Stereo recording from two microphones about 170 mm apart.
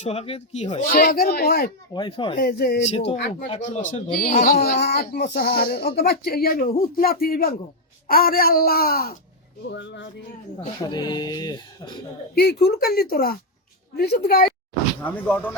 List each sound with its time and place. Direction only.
0.0 s speech: 35° left (ahead or behind)
0.9 s speech: 60° left (ahead or behind)
1.9 s speech: 30° left (ahead or behind)
2.4 s speech: 65° left (ahead or behind)
2.8 s speech: 35° left (ahead or behind); by 9.1 s 60° left (ahead or behind)
9.6 s a sound: 90° left
10.8 s speech: 25° left (ahead or behind)
12.3 s a woman's voice: 70° left (ahead or behind)
15.0 s speech: 10° left (ahead or behind)